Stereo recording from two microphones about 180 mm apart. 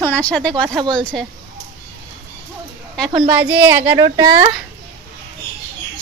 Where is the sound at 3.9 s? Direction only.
25° right (ahead or behind).